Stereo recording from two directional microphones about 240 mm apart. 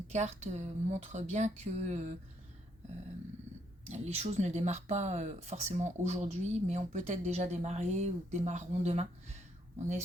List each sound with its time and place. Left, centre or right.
0.1 s speech: right
3.8 s speech: right